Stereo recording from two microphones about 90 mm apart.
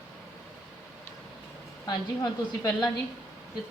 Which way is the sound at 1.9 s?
50° left (ahead or behind).